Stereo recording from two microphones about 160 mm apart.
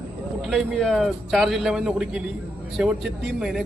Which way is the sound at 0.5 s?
Centre (ahead or behind).